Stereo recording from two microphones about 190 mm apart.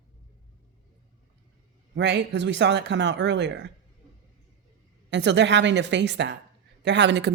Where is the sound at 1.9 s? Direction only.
65° right (ahead or behind).